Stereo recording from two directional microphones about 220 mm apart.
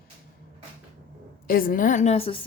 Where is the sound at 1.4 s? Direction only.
40° left (ahead or behind).